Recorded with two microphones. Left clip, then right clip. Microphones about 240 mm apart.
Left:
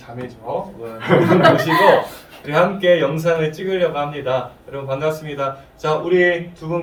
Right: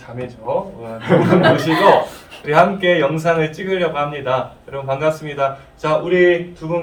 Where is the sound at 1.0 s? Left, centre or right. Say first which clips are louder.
Even; centre.